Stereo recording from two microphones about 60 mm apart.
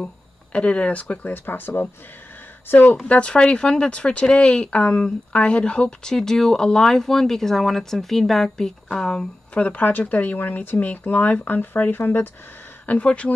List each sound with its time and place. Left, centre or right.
0.0 s speech: centre
3.1 s speech: centre; by 12.3 s left
12.8 s speech: left